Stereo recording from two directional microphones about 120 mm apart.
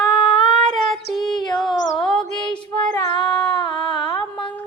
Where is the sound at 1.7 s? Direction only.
40° left (ahead or behind).